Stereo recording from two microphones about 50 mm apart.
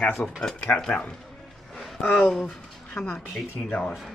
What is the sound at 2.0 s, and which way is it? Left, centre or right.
Cutlery, left.